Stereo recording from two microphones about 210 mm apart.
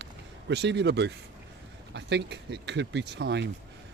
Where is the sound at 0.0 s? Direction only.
55° right (ahead or behind).